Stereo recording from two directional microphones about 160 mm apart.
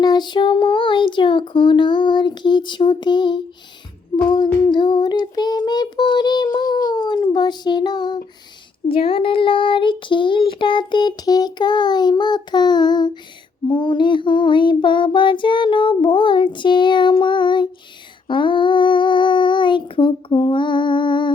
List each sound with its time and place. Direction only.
0.0 s child singing: 25° left (ahead or behind)
4.7 s child singing: 30° left (ahead or behind)
6.8 s speech: 25° left (ahead or behind)
8.9 s child singing: 35° left (ahead or behind)